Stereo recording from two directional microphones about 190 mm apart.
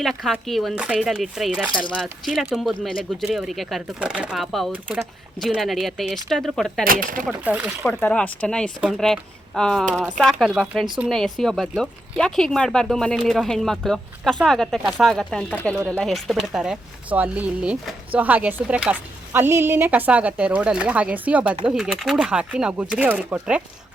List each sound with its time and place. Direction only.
0.0 s speech: centre (ahead or behind)
6.8 s speech: 50° right (ahead or behind)
7.3 s speech: 5° right (ahead or behind)
8.0 s speech: 5° left (ahead or behind)